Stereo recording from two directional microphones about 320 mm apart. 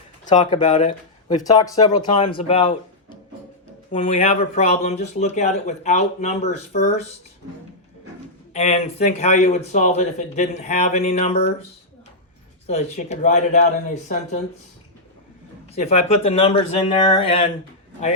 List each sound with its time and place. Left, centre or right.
0.3 s speech: centre
3.9 s speech: centre
8.5 s speech: centre
12.6 s speech: left
15.7 s speech: left